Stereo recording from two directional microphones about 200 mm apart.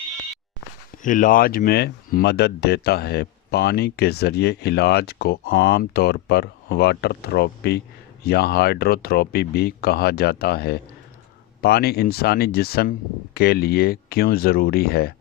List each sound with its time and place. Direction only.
1.0 s speech: 40° left (ahead or behind)